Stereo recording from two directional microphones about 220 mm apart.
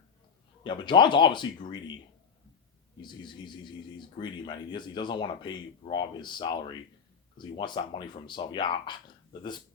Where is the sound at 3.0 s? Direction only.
20° left (ahead or behind).